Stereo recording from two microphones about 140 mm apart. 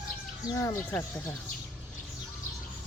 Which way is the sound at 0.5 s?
20° left (ahead or behind).